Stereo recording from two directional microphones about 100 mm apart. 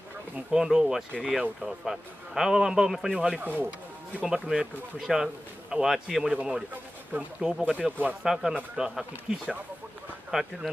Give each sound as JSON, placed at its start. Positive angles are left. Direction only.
{"t": 0.5, "sound": "a man's voice", "side_deg": -5}
{"t": 3.3, "sound": "speech", "side_deg": -20}
{"t": 4.2, "sound": "a man's voice", "side_deg": -10}